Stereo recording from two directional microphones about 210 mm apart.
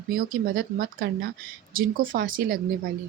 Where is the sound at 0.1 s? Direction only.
45° right (ahead or behind).